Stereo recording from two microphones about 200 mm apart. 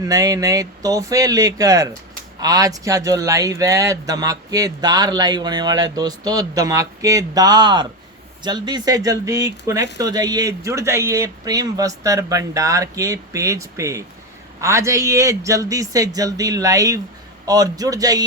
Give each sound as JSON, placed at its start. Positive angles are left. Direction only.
{"t": 0.0, "sound": "speech", "side_deg": -15}